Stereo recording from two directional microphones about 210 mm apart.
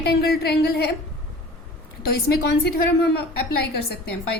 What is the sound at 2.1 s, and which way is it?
A woman's voice, 50° left (ahead or behind).